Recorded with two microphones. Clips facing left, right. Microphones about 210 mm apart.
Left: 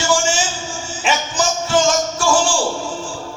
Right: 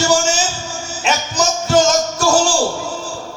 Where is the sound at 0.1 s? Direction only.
40° right (ahead or behind).